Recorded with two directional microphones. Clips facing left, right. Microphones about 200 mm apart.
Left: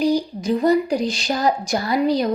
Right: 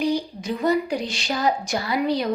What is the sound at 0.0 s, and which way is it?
A woman's voice, 35° left (ahead or behind).